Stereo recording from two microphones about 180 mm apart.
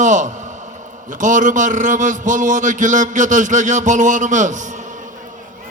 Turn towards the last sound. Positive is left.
turn(degrees=-45)  # may be behind; listen again after turning